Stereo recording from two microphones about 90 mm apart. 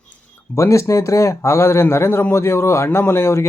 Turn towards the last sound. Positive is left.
turn(degrees=30)  # may be behind; listen again after turning